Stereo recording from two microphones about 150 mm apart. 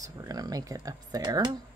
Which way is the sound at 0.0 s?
25° right (ahead or behind).